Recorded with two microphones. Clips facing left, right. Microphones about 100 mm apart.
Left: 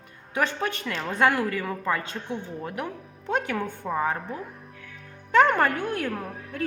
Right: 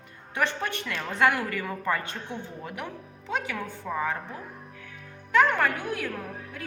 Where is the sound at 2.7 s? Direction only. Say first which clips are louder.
Left 4 dB; 40° left (ahead or behind).